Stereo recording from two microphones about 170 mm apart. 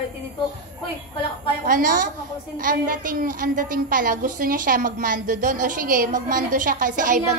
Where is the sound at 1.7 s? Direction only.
55° right (ahead or behind).